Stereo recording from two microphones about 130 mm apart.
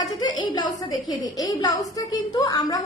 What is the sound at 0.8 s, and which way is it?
A woman's voice, 30° left (ahead or behind).